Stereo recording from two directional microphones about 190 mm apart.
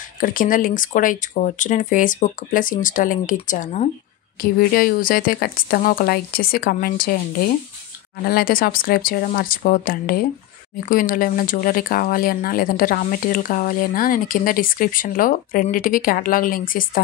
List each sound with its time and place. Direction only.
0.2 s speech: 45° left (ahead or behind)
4.4 s speech: 50° left (ahead or behind)
8.3 s speech: 50° left (ahead or behind)